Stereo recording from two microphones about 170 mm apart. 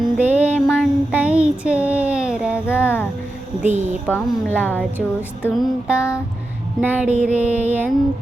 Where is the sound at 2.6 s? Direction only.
15° left (ahead or behind).